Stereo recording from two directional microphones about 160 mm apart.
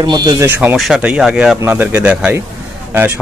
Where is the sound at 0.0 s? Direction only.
25° right (ahead or behind).